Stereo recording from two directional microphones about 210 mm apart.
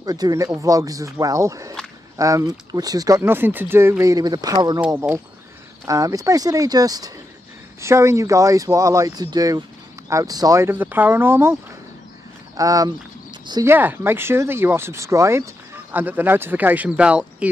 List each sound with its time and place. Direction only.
0.0 s speech: 20° right (ahead or behind)
4.8 s speech: 10° right (ahead or behind)
12.5 s speech: 15° right (ahead or behind)